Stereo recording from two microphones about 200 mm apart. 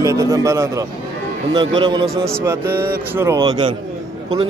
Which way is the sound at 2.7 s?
10° right (ahead or behind).